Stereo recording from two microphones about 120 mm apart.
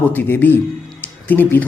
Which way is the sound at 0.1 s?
15° left (ahead or behind).